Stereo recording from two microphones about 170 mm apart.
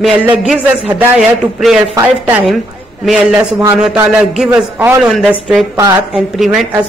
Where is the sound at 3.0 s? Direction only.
5° right (ahead or behind).